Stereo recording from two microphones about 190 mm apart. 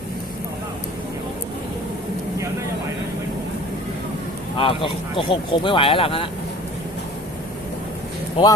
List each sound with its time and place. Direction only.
4.5 s speech: 25° left (ahead or behind)
8.4 s speech: 25° left (ahead or behind)